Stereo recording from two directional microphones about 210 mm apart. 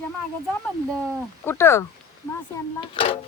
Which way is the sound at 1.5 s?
10° left (ahead or behind).